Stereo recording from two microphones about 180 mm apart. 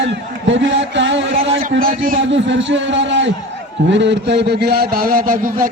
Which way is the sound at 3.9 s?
85° right.